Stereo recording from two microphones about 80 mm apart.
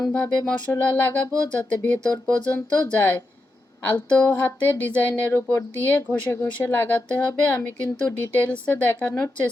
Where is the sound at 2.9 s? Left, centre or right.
Left.